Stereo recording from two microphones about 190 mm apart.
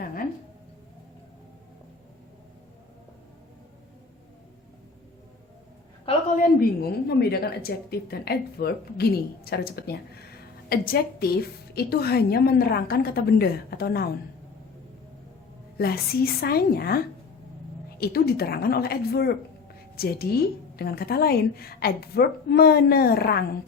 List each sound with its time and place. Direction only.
0.0 s a sound: 50° left (ahead or behind)
6.3 s a woman's voice: 45° left (ahead or behind)
7.1 s speech: 55° left (ahead or behind)
15.8 s a woman's voice: 55° left (ahead or behind)